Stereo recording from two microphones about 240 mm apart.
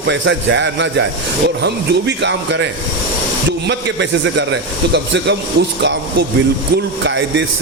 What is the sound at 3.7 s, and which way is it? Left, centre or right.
Speech, right.